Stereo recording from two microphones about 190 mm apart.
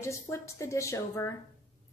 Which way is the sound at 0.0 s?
15° left (ahead or behind).